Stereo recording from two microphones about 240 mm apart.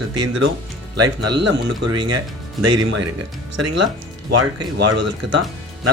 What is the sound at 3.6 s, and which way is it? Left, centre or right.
Speech, right.